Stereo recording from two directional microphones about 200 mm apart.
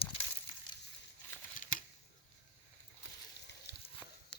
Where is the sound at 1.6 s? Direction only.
40° left (ahead or behind).